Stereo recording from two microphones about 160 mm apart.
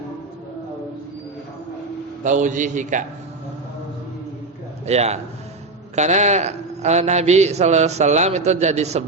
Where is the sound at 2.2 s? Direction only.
50° right (ahead or behind).